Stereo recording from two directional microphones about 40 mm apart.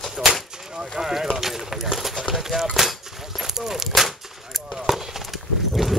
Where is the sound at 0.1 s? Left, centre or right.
Centre.